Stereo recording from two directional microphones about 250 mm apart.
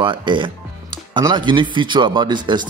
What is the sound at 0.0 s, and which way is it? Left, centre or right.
A man's voice, centre.